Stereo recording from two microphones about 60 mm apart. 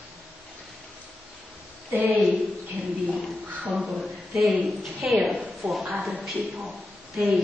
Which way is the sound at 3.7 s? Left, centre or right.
Centre.